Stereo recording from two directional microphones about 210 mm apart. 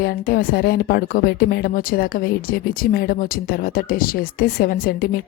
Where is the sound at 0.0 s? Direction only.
45° left (ahead or behind).